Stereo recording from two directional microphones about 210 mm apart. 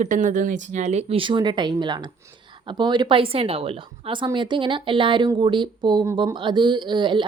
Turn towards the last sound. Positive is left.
turn(degrees=-20)  # may be behind; listen again after turning